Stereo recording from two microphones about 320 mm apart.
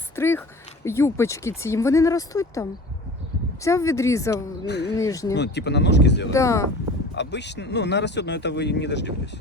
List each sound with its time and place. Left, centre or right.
0.2 s speech: centre
4.6 s speech: left
4.9 s speech: centre
5.4 s speech: left
6.3 s speech: centre
7.2 s speech: left